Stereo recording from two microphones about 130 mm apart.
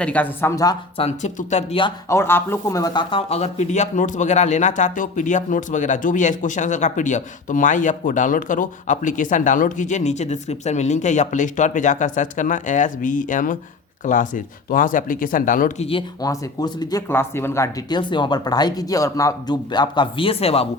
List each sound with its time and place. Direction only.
0.0 s speech: 10° left (ahead or behind)
0.5 s speech: 30° left (ahead or behind)
0.9 s speech: 55° left (ahead or behind)
1.4 s speech: 65° left (ahead or behind)
2.0 s speech: 20° left (ahead or behind); by 15.7 s 90° left
15.8 s speech: 45° left (ahead or behind)
16.2 s speech: 30° left (ahead or behind)
17.1 s speech: 20° left (ahead or behind)
17.8 s speech: 35° left (ahead or behind)